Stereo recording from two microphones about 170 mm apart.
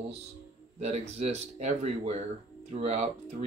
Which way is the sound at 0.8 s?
40° right (ahead or behind).